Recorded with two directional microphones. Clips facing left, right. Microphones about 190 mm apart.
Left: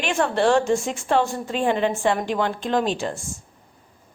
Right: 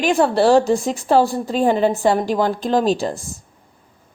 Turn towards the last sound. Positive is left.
turn(degrees=-35)  # may be behind; listen again after turning